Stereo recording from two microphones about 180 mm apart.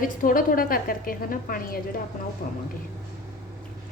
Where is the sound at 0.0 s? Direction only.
50° left (ahead or behind).